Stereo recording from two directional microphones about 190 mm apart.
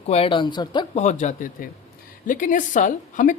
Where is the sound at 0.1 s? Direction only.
30° left (ahead or behind).